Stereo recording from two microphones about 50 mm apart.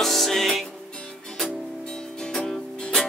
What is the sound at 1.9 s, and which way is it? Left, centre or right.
Music, centre.